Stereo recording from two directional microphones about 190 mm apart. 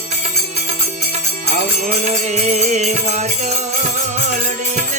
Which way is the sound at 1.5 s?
40° right (ahead or behind).